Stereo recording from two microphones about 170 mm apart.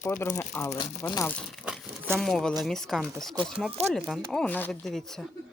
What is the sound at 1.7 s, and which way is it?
Crumpling, 10° right (ahead or behind).